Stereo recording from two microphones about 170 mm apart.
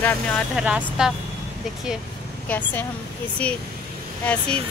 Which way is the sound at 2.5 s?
10° left (ahead or behind).